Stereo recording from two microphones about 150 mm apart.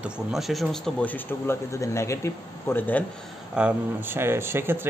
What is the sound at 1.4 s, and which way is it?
A man's voice, 20° left (ahead or behind).